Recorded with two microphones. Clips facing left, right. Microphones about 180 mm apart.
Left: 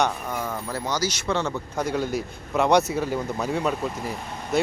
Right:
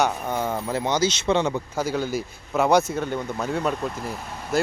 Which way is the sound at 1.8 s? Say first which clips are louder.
Left 1 dB; centre (ahead or behind).